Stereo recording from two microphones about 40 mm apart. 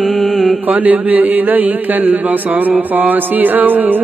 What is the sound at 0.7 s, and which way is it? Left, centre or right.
A man's voice, right.